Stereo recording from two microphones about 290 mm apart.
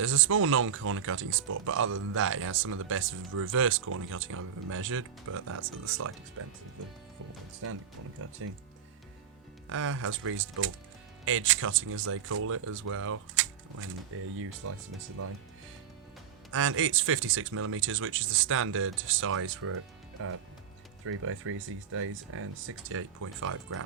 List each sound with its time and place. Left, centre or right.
0.0 s speech: right
9.6 s speech: right
12.0 s speech: right
16.5 s speech: right
21.0 s speech: right